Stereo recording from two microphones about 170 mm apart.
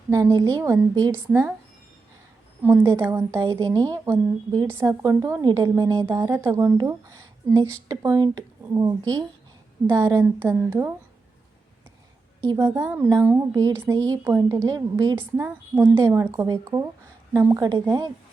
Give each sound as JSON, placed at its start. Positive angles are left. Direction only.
{"t": 0.1, "sound": "a woman's voice", "side_deg": -20}
{"t": 2.6, "sound": "a woman's voice", "side_deg": -15}
{"t": 12.5, "sound": "a woman's voice", "side_deg": -15}